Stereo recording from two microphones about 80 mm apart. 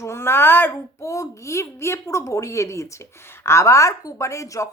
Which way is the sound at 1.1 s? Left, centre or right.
Left.